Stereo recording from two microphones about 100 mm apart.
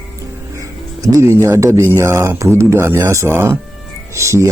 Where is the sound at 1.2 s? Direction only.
30° right (ahead or behind).